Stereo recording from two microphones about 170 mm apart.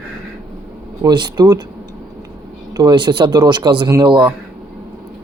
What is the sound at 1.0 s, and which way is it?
Speech, 25° right (ahead or behind).